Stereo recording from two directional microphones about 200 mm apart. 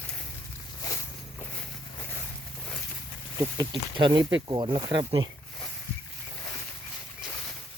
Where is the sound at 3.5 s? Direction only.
20° right (ahead or behind).